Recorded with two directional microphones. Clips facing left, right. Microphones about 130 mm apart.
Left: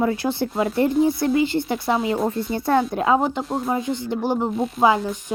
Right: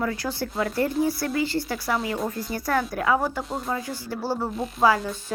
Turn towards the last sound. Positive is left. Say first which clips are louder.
# left 3 dB
turn(degrees=15)  # may be behind; listen again after turning